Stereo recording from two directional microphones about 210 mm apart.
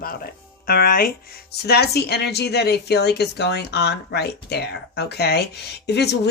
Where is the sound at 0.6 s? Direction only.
45° left (ahead or behind).